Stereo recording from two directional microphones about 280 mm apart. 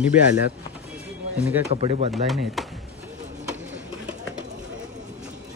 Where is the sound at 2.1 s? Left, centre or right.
Centre.